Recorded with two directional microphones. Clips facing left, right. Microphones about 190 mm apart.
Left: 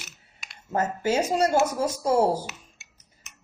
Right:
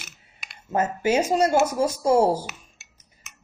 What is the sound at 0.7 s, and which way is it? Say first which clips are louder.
Speech: right 3 dB; 15° right (ahead or behind).